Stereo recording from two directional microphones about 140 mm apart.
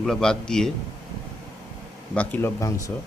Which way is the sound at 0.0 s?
5° left (ahead or behind).